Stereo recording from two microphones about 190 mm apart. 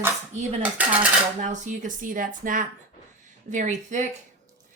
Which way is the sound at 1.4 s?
40° right (ahead or behind).